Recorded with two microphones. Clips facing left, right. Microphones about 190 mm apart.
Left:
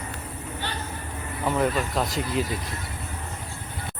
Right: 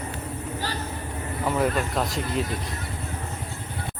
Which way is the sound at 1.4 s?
Centre (ahead or behind).